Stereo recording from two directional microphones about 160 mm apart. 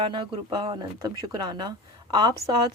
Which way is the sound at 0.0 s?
30° right (ahead or behind).